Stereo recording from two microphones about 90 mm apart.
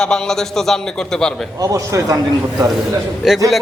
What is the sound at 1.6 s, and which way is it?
Speech, 40° right (ahead or behind).